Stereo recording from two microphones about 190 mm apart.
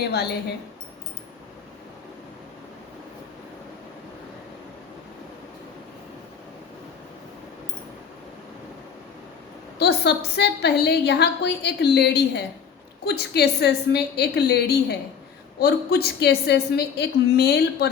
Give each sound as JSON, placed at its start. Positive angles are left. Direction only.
{"t": 0.1, "sound": "a woman's voice", "side_deg": 60}
{"t": 9.7, "sound": "a woman's voice", "side_deg": 60}